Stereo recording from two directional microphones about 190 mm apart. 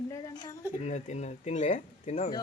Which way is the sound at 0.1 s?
20° left (ahead or behind).